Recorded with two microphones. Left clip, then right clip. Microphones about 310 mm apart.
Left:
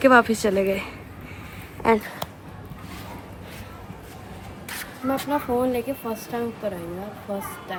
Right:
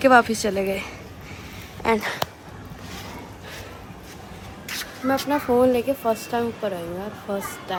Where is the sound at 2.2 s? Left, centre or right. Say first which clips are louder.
Right 6 dB; right.